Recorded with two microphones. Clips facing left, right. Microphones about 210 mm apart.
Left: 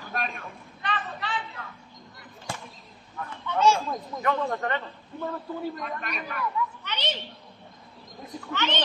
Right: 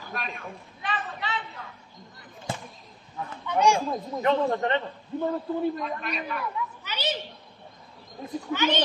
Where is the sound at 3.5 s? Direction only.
15° right (ahead or behind).